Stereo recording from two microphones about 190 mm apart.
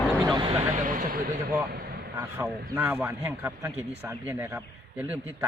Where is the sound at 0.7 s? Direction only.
45° right (ahead or behind).